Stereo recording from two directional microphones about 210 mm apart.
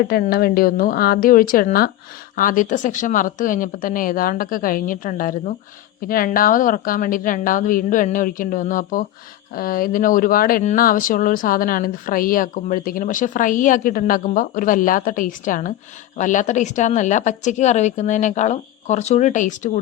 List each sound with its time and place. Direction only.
0.1 s a woman's voice: 45° left (ahead or behind)